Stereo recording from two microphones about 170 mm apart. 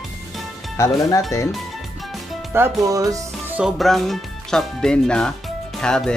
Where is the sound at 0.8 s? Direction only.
20° left (ahead or behind).